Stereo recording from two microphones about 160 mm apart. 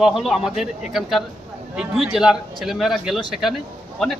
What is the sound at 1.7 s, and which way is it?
Speech, 5° right (ahead or behind).